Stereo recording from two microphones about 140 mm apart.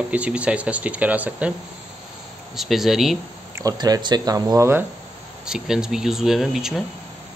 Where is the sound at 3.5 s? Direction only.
25° right (ahead or behind).